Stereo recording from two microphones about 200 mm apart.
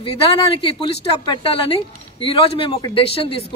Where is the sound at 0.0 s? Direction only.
30° left (ahead or behind).